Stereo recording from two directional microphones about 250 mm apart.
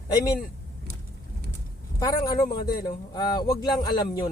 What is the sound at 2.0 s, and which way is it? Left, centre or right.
Speech, centre.